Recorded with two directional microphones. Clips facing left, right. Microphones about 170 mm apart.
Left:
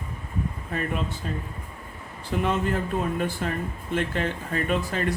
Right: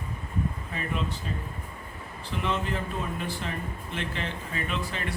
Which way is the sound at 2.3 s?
50° left (ahead or behind).